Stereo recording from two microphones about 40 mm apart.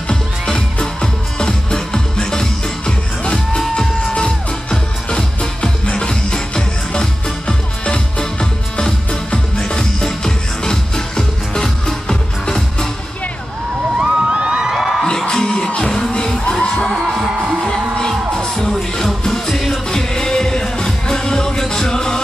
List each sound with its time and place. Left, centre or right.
0.1 s music: centre
13.9 s a sound: right
14.7 s music: centre
15.0 s music: centre
17.9 s music: centre